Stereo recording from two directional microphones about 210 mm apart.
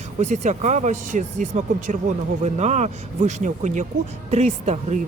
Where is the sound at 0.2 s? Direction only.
35° right (ahead or behind).